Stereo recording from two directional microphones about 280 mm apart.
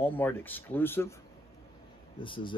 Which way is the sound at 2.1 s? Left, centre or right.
Centre.